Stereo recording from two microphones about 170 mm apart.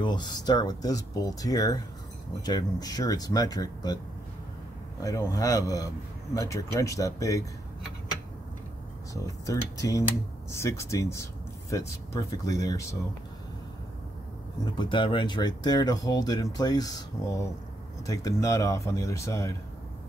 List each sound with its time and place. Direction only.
0.0 s speech: 25° left (ahead or behind)
5.0 s speech: 20° left (ahead or behind)
9.1 s speech: 20° left (ahead or behind)
14.6 s speech: 30° left (ahead or behind)